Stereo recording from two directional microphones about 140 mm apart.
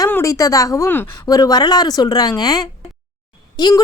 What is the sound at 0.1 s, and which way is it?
A woman's voice, 20° left (ahead or behind).